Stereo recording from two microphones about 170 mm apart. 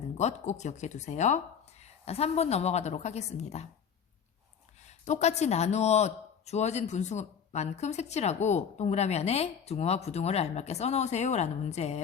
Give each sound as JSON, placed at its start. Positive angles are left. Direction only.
{"t": 0.2, "sound": "speech", "side_deg": 40}
{"t": 4.8, "sound": "speech", "side_deg": 40}